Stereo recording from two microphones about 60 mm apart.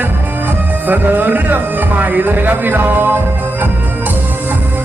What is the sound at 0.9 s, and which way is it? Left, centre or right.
Speech, right.